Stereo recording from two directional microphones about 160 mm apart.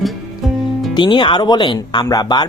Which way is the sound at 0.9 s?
30° left (ahead or behind).